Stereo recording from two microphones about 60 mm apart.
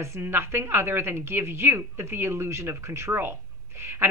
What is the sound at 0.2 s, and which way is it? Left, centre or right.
A woman's voice, right.